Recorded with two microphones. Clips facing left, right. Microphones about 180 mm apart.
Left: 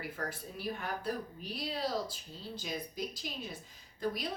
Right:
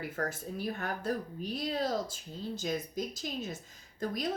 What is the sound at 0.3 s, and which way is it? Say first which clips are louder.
Speech: right 3 dB; 45° right (ahead or behind).